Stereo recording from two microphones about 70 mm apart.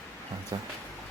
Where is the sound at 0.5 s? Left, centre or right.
Right.